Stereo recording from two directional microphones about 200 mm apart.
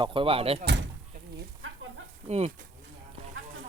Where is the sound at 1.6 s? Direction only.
90° right.